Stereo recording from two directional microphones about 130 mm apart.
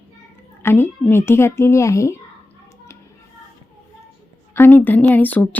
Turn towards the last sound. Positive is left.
turn(degrees=10)  # may be behind; listen again after turning